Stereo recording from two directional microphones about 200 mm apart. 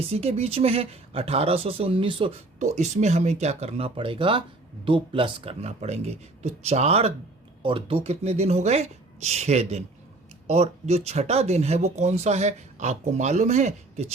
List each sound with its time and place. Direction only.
0.0 s speech: 30° right (ahead or behind)